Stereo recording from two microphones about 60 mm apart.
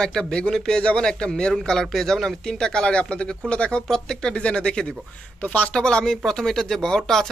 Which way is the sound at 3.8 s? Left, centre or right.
Centre.